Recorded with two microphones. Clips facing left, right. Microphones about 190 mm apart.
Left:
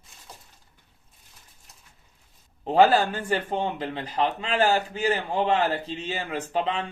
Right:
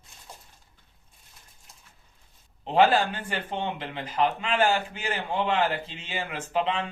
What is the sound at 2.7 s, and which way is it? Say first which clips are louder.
A man's voice: left 2 dB; 40° left (ahead or behind).